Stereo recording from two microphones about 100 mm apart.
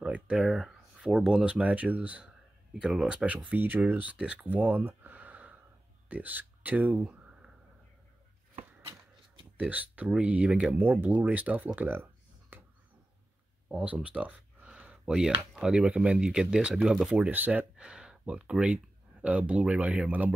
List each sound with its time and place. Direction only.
0.0 s speech: 10° right (ahead or behind)
9.6 s speech: 15° right (ahead or behind)
13.7 s a sound: 15° right (ahead or behind)
15.5 s speech: 10° right (ahead or behind)